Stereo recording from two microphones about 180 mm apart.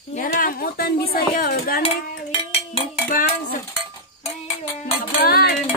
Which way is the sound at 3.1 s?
50° left (ahead or behind).